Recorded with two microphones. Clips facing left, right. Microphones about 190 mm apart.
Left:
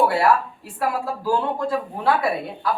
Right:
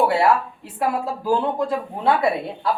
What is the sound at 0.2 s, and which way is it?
Speech, 20° right (ahead or behind).